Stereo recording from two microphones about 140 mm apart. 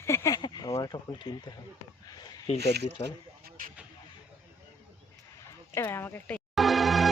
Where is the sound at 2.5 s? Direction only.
50° left (ahead or behind).